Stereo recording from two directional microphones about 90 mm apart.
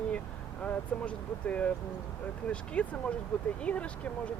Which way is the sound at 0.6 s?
15° left (ahead or behind).